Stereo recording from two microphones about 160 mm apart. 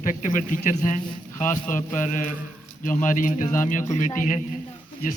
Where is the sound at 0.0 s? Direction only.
55° left (ahead or behind).